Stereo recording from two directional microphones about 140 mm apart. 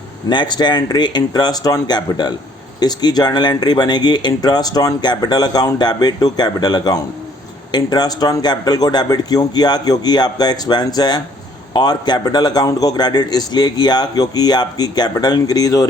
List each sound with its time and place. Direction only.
0.3 s speech: 30° left (ahead or behind)